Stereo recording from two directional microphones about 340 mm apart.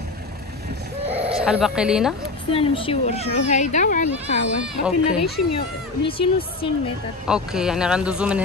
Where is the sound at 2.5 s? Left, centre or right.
Centre.